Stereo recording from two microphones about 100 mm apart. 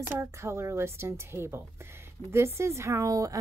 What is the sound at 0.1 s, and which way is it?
A woman's voice, 25° right (ahead or behind).